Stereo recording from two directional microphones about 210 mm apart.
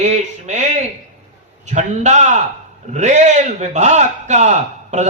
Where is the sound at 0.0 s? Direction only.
35° right (ahead or behind).